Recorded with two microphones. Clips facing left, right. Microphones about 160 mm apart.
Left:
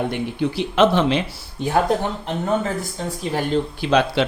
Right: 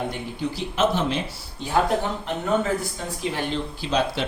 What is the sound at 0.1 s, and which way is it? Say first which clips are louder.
Speech: left 6 dB; 65° left (ahead or behind).